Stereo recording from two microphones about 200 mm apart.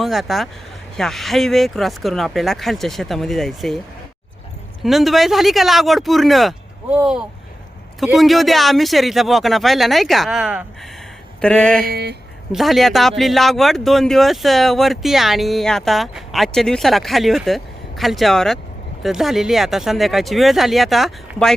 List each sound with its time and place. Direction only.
0.0 s speech: centre (ahead or behind)
4.8 s speech: centre (ahead or behind)
11.9 s speech: 55° right (ahead or behind)
12.5 s speech: centre (ahead or behind)